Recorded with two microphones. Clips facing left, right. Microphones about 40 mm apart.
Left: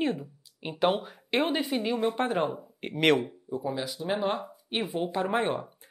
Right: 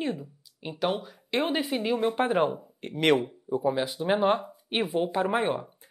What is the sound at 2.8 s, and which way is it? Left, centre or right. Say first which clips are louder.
Speech: left 2 dB; centre.